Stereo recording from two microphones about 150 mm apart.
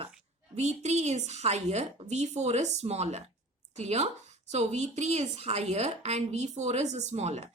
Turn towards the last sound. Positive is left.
turn(degrees=-45)  # may be behind; listen again after turning